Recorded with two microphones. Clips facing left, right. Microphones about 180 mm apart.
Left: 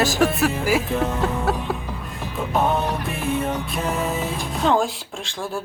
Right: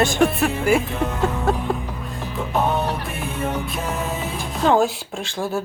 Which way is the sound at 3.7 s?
Centre (ahead or behind).